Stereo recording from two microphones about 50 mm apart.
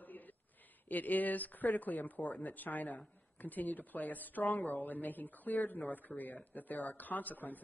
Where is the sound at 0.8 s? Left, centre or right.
Left.